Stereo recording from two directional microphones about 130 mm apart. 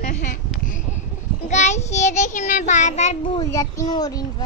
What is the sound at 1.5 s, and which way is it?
Child singing, 65° left (ahead or behind).